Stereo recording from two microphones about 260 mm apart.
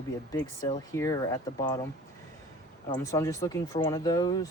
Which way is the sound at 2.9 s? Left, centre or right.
Centre.